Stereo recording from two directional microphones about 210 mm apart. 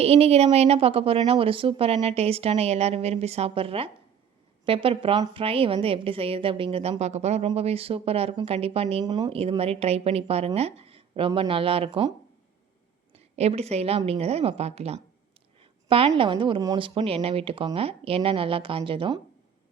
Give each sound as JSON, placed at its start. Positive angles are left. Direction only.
{"t": 0.0, "sound": "a woman's voice", "side_deg": -30}
{"t": 13.1, "sound": "a woman's voice", "side_deg": -30}